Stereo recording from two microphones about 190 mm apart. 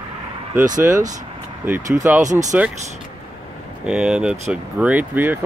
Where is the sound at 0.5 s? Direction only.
40° right (ahead or behind).